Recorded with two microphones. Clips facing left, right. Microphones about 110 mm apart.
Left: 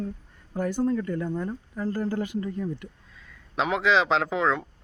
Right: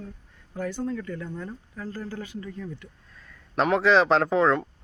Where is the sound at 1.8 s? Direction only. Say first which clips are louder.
Left 8 dB; 45° left (ahead or behind).